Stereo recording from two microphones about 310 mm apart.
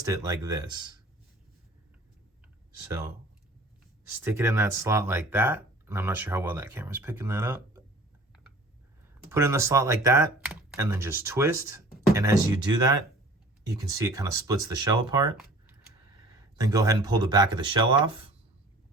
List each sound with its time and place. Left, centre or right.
0.0 s speech: centre
4.2 s speech: centre
9.3 s speech: centre
16.6 s speech: centre